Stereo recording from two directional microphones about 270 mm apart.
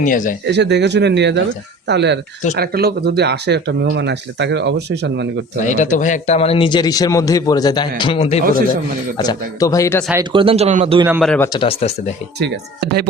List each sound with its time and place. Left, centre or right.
0.0 s a man's voice: left
0.4 s speech: right
5.6 s a man's voice: left; by 10.1 s centre
10.1 s speech: centre
11.0 s a man's voice: centre
11.4 s a man's voice: centre
12.4 s speech: right